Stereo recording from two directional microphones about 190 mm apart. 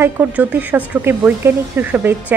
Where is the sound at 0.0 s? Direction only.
10° right (ahead or behind).